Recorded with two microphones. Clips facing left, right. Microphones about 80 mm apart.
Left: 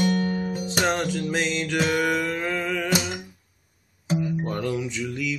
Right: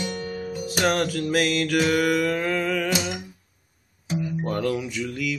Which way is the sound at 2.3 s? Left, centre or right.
Centre.